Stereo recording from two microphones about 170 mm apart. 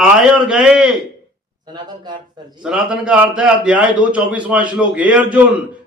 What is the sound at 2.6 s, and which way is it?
A man's voice, 5° right (ahead or behind).